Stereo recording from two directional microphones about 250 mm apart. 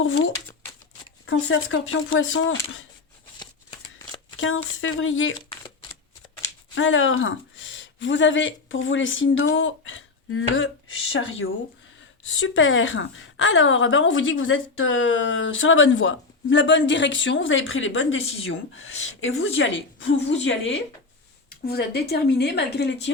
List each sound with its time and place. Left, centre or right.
0.0 s a woman's voice: left
3.3 s shuffling cards: centre
4.4 s a woman's voice: left
6.7 s speech: left
12.4 s a woman's voice: left